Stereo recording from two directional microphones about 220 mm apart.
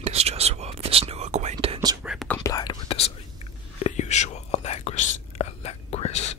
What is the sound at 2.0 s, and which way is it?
Whispering, 5° left (ahead or behind).